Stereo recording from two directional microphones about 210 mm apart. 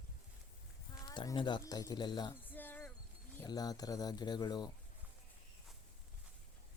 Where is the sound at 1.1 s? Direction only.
20° left (ahead or behind).